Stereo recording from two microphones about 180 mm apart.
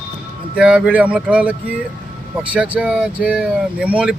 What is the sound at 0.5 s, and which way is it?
Speech, 5° right (ahead or behind).